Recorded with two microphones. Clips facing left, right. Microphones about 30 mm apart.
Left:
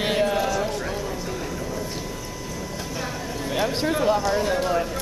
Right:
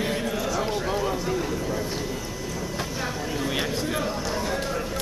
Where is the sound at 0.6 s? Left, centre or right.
Centre.